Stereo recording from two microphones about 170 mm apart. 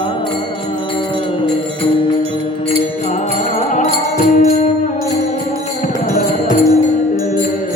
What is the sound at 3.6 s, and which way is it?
Music, 45° left (ahead or behind).